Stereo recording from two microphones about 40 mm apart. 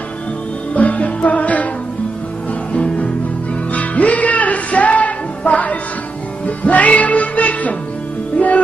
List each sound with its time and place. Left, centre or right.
0.7 s music: left
2.7 s music: left